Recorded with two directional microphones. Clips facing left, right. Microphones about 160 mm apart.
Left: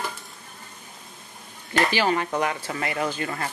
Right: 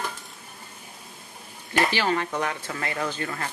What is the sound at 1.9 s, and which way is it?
Speech, 15° left (ahead or behind).